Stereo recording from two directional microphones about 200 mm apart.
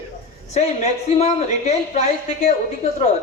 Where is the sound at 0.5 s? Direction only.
35° left (ahead or behind).